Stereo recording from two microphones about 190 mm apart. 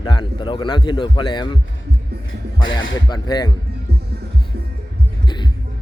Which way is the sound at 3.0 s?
25° left (ahead or behind).